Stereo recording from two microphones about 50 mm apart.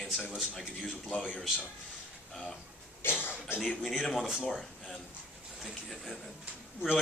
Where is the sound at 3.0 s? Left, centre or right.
Left.